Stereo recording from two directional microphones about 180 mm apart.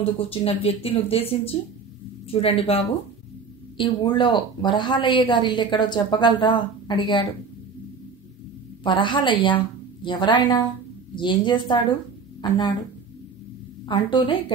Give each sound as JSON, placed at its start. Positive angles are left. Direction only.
{"t": 0.2, "sound": "speech", "side_deg": 30}
{"t": 8.8, "sound": "a woman's voice", "side_deg": 25}
{"t": 13.8, "sound": "speech", "side_deg": 25}